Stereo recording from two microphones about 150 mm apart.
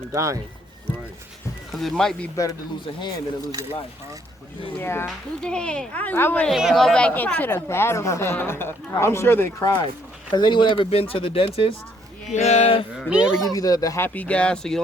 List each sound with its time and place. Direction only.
0.1 s speech: 20° right (ahead or behind)
1.7 s speech: centre (ahead or behind)
2.3 s speech: 20° left (ahead or behind)
4.8 s a woman's voice: 15° left (ahead or behind)
5.0 s a woman's voice: 5° left (ahead or behind); by 12.8 s 45° left (ahead or behind)
13.1 s speech: 5° right (ahead or behind)
13.5 s a woman's voice: 25° left (ahead or behind); by 14.8 s 5° left (ahead or behind)